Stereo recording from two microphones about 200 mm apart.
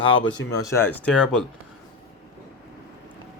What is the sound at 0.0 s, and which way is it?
Speech, 75° left (ahead or behind).